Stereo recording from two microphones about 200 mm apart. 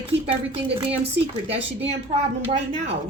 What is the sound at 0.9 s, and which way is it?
Speech, 30° right (ahead or behind).